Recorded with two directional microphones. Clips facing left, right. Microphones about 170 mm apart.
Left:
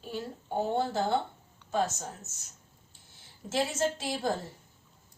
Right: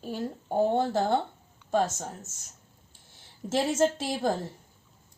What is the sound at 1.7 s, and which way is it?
Speech, 45° right (ahead or behind).